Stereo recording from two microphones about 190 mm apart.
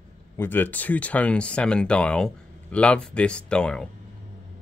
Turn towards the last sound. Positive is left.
turn(degrees=5)  # may be behind; listen again after turning